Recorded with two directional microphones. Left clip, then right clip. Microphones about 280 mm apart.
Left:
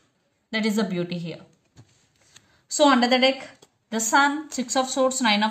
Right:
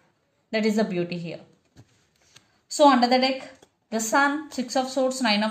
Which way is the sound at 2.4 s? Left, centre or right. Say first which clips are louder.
Left 1 dB; centre.